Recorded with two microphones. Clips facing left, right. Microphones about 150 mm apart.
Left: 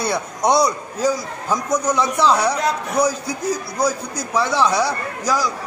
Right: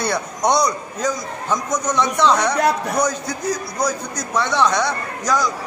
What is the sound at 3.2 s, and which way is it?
A man's voice, 30° left (ahead or behind).